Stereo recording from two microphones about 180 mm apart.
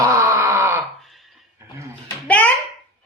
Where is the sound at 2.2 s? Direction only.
5° left (ahead or behind).